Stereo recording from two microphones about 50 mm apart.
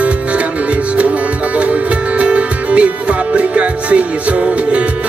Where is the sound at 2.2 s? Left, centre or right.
Right.